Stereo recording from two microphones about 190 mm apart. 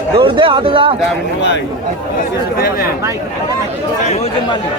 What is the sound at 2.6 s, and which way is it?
Speech, 50° left (ahead or behind).